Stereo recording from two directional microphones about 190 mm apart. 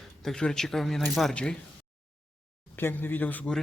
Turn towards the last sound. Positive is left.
turn(degrees=5)  # may be behind; listen again after turning